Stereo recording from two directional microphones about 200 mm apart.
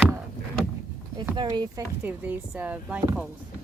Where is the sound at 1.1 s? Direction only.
20° right (ahead or behind).